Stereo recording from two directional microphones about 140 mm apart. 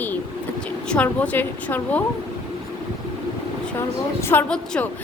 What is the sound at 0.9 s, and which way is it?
A woman's voice, 10° left (ahead or behind).